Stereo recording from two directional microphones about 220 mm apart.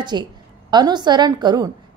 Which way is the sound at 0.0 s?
20° right (ahead or behind).